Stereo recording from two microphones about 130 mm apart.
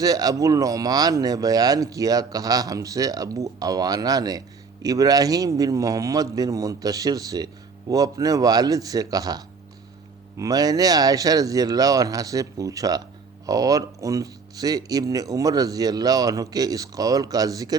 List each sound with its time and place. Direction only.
0.0 s speech: 30° right (ahead or behind)